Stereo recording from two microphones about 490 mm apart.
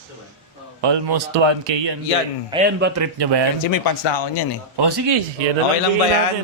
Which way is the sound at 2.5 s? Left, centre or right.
Centre.